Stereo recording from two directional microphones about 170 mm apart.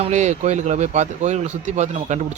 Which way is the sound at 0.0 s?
40° right (ahead or behind).